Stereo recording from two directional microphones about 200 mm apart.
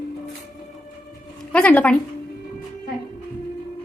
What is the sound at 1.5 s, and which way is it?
Speech, 5° left (ahead or behind).